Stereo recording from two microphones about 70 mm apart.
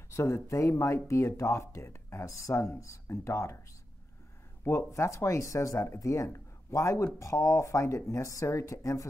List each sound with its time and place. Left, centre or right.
0.1 s speech: left
4.6 s speech: left